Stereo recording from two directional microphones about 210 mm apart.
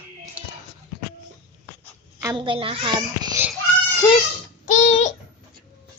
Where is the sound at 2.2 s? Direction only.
20° right (ahead or behind).